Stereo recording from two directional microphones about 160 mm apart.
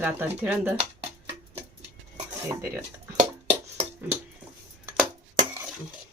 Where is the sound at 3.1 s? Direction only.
40° right (ahead or behind).